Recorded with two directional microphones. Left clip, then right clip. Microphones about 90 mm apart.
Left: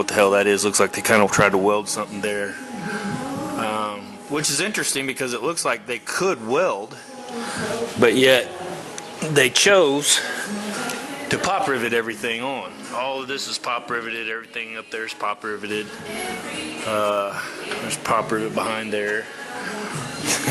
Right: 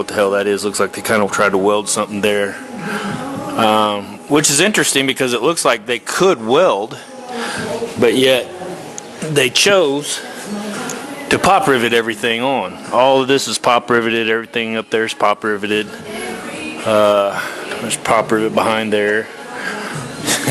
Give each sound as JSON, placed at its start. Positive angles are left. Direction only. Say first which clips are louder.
{"t": 0.0, "sound": "speech", "louder": "right 2 dB", "side_deg": 5}
{"t": 2.2, "sound": "speech", "louder": "right 9 dB", "side_deg": -35}
{"t": 2.9, "sound": "music", "louder": "right 6 dB", "side_deg": -35}
{"t": 3.5, "sound": "speech", "louder": "right 13 dB", "side_deg": -35}
{"t": 4.4, "sound": "speech", "louder": "right 10 dB", "side_deg": -25}
{"t": 7.7, "sound": "a man's voice", "louder": "right 3 dB", "side_deg": 0}
{"t": 10.0, "sound": "speech", "louder": "left 3 dB", "side_deg": 10}
{"t": 11.3, "sound": "speech", "louder": "right 9 dB", "side_deg": -35}
{"t": 18.3, "sound": "speech", "louder": "right 9 dB", "side_deg": -40}
{"t": 20.2, "sound": "a sound", "louder": "right 5 dB", "side_deg": 0}